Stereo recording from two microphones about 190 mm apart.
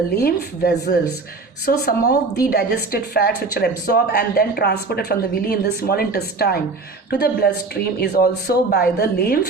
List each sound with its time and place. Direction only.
0.2 s a woman's voice: 55° left (ahead or behind)